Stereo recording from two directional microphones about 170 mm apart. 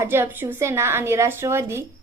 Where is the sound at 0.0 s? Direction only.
15° right (ahead or behind).